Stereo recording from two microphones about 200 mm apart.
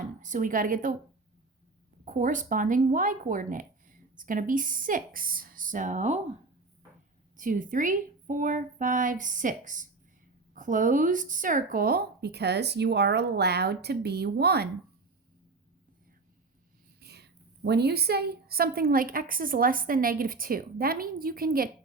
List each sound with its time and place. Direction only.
0.2 s speech: 40° right (ahead or behind)
2.0 s speech: 40° right (ahead or behind)
7.3 s a woman's voice: 40° right (ahead or behind)
17.0 s a woman's voice: 55° right (ahead or behind)